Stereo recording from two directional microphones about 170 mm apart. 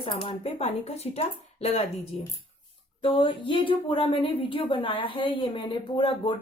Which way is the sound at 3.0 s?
30° left (ahead or behind).